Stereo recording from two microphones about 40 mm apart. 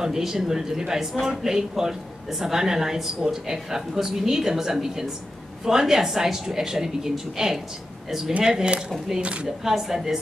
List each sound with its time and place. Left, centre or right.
0.0 s speech: centre
8.3 s speech: right
9.7 s speech: centre